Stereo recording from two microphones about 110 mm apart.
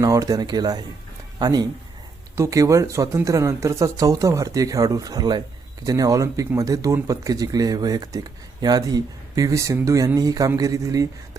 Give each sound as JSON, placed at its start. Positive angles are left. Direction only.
{"t": 0.0, "sound": "speech", "side_deg": -30}